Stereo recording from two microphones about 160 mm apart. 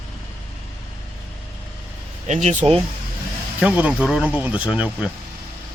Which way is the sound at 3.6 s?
10° right (ahead or behind).